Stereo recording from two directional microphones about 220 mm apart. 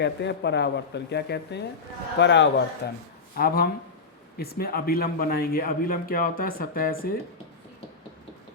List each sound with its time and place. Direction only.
0.0 s a man's voice: 50° left (ahead or behind)